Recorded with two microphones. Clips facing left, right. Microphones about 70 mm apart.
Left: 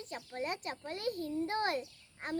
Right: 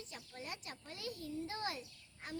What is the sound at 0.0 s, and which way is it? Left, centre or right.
Child singing, left.